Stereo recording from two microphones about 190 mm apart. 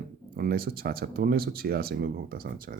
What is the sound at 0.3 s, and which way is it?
Speech, 50° right (ahead or behind).